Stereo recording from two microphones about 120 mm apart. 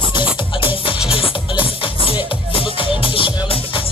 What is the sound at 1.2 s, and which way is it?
Music, 50° left (ahead or behind).